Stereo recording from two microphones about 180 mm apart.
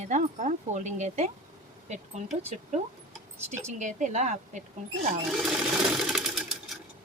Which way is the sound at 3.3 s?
15° right (ahead or behind).